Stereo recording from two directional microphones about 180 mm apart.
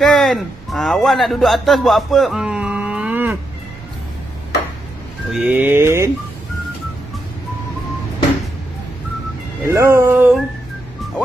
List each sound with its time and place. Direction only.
0.0 s a man's voice: centre (ahead or behind)
5.3 s speech: 10° right (ahead or behind)
9.7 s speech: 15° right (ahead or behind)